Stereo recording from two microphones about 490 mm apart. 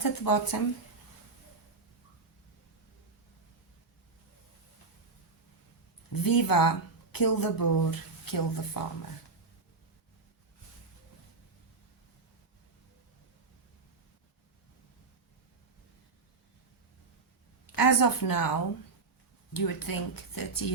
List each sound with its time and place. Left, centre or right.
0.0 s speech: left
6.2 s speech: left
17.7 s speech: left